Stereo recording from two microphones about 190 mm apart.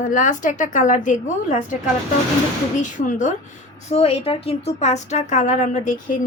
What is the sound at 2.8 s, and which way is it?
Speech, 40° left (ahead or behind).